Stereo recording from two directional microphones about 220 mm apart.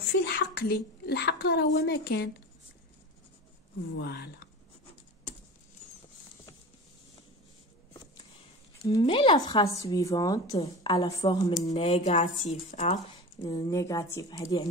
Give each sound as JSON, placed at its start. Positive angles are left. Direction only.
{"t": 0.2, "sound": "a woman's voice", "side_deg": 50}
{"t": 4.0, "sound": "speech", "side_deg": 45}
{"t": 8.8, "sound": "speech", "side_deg": 20}
{"t": 13.4, "sound": "speech", "side_deg": 15}